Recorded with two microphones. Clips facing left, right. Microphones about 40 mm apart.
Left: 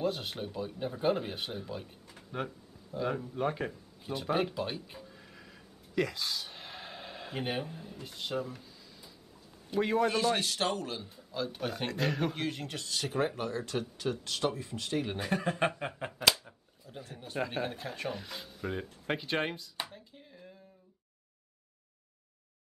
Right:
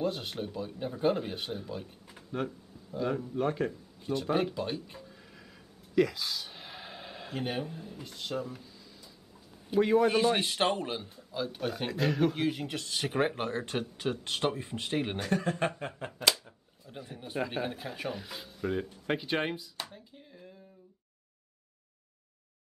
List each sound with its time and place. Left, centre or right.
0.0 s speech: centre
9.8 s speech: centre
10.0 s a man's voice: centre
11.1 s speech: centre
12.8 s a man's voice: right
13.1 s speech: right
15.1 s speech: centre
16.1 s a sound: centre
16.9 s speech: centre